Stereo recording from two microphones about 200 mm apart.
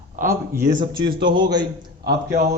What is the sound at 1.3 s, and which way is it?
Speech, 20° right (ahead or behind).